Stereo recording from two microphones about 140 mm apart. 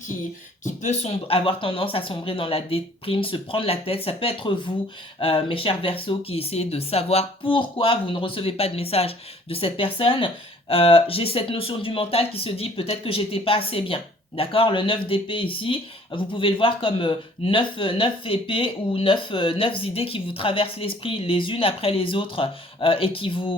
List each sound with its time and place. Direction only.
0.6 s speech: 55° left (ahead or behind); by 23.6 s 40° left (ahead or behind)